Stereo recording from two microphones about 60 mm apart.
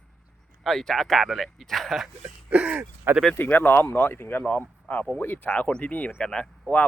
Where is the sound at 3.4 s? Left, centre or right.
Left.